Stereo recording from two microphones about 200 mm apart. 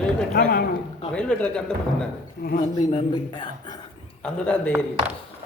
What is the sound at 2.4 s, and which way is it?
Speech, 50° left (ahead or behind).